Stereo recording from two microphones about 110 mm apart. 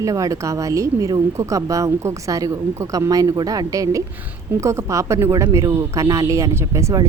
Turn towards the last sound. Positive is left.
turn(degrees=-25)  # may be behind; listen again after turning